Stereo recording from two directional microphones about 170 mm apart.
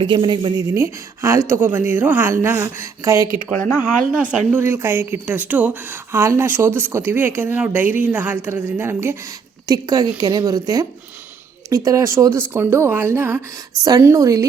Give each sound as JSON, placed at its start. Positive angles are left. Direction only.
{"t": 0.0, "sound": "speech", "side_deg": -25}
{"t": 3.8, "sound": "speech", "side_deg": -5}